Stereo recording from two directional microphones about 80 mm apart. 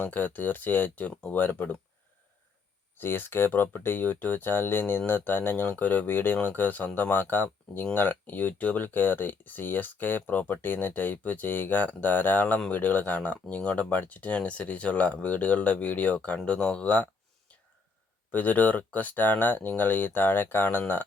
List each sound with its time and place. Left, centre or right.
0.0 s speech: left
3.0 s speech: left
18.3 s speech: left